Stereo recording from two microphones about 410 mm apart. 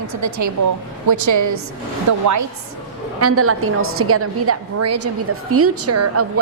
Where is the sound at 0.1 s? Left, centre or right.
Right.